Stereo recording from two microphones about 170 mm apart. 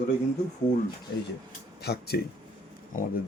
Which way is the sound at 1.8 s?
75° left (ahead or behind).